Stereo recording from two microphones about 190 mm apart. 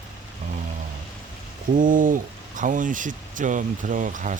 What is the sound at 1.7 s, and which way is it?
Speech, 45° right (ahead or behind).